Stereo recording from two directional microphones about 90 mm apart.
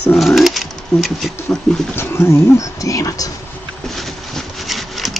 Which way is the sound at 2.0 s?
30° left (ahead or behind).